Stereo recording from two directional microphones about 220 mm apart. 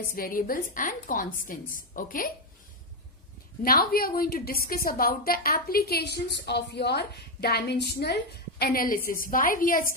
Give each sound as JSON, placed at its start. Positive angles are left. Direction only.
{"t": 0.1, "sound": "a woman's voice", "side_deg": 40}
{"t": 3.6, "sound": "a woman's voice", "side_deg": 40}